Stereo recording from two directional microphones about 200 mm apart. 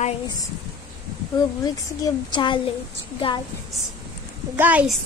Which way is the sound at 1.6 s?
20° left (ahead or behind).